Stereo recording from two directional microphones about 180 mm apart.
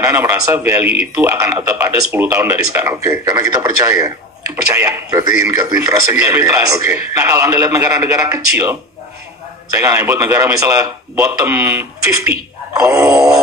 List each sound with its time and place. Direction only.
0.0 s speech: 15° right (ahead or behind)
9.8 s speech: 15° right (ahead or behind)